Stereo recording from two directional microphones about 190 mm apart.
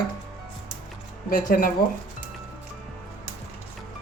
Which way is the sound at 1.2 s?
50° left (ahead or behind).